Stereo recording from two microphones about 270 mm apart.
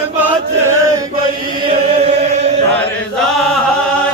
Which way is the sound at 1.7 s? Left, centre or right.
Right.